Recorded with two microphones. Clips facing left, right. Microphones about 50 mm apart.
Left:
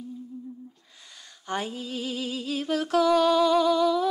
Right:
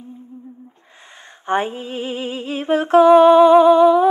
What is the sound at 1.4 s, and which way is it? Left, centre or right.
Female singing, right.